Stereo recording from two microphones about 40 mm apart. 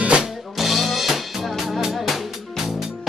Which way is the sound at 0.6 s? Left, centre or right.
Centre.